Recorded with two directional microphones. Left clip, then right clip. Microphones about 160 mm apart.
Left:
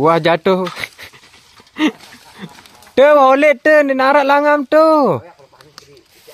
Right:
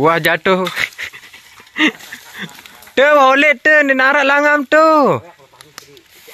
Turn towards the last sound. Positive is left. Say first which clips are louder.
# right 1 dB
turn(degrees=10)  # may be behind; listen again after turning